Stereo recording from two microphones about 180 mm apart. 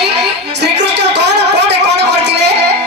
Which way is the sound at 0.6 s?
70° right (ahead or behind).